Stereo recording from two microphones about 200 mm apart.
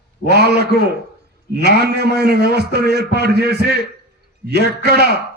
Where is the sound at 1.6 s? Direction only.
55° right (ahead or behind).